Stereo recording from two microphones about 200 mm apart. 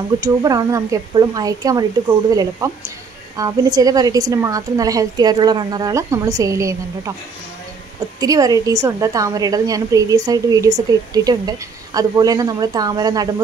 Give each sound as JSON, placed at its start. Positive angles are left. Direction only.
{"t": 0.2, "sound": "a woman's voice", "side_deg": -20}
{"t": 8.2, "sound": "a woman's voice", "side_deg": -20}